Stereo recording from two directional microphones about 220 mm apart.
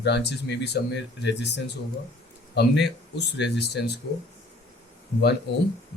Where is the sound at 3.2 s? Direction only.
50° left (ahead or behind).